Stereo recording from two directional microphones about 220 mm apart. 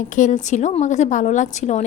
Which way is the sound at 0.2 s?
35° left (ahead or behind).